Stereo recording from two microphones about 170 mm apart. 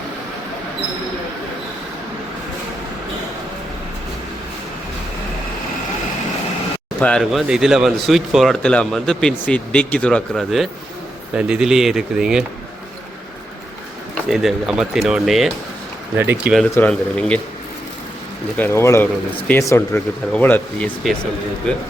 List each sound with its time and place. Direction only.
7.0 s speech: 5° left (ahead or behind)
14.3 s speech: centre (ahead or behind)
16.1 s speech: 10° right (ahead or behind)
16.7 s speech: 5° left (ahead or behind)
18.5 s speech: 15° left (ahead or behind)